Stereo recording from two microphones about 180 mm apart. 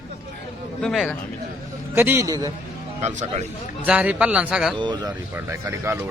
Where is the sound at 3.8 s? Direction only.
5° right (ahead or behind).